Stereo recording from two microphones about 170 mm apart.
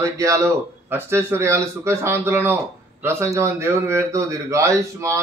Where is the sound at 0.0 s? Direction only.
20° right (ahead or behind).